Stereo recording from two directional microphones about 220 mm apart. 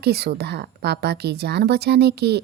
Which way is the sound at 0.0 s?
45° right (ahead or behind).